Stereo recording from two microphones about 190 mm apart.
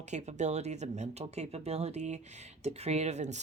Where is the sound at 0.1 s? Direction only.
35° right (ahead or behind).